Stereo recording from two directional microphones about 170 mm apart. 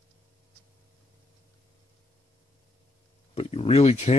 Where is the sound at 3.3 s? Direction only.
35° left (ahead or behind).